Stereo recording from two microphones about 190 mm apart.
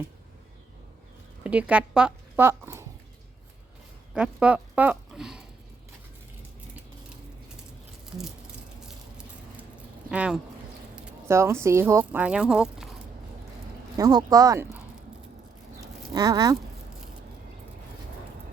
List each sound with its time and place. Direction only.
1.5 s speech: 5° right (ahead or behind)
4.1 s speech: 5° right (ahead or behind)
10.1 s speech: 5° right (ahead or behind)
13.9 s speech: 20° right (ahead or behind)
16.1 s speech: 20° right (ahead or behind)